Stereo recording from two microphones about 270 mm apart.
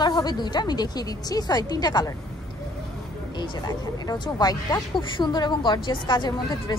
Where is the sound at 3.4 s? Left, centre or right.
Centre.